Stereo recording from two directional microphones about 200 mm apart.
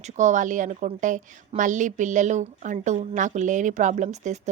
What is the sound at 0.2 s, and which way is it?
A woman's voice, 40° right (ahead or behind).